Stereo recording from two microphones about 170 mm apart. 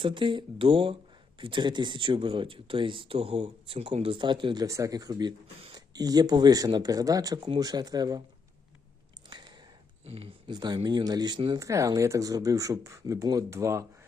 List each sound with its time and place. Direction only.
0.0 s speech: 30° right (ahead or behind)
9.3 s a sound: 25° right (ahead or behind)
10.1 s speech: 35° right (ahead or behind); by 13.8 s 15° right (ahead or behind)